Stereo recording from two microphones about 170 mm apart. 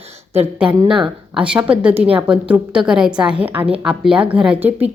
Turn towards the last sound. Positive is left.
turn(degrees=-10)  # may be behind; listen again after turning